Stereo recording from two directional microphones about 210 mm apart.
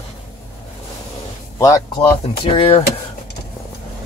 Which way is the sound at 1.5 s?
15° left (ahead or behind).